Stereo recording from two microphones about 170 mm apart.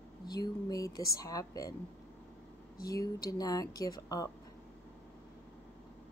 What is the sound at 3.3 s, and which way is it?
Speech, 20° left (ahead or behind).